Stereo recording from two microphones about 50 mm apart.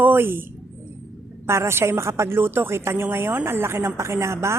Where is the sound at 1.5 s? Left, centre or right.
Right.